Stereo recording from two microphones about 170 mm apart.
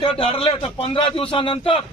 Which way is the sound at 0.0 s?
35° left (ahead or behind).